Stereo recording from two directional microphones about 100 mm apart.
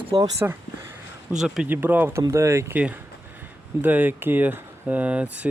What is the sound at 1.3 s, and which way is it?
Speech, 5° right (ahead or behind).